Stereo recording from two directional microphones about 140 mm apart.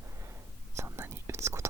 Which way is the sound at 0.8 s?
20° right (ahead or behind).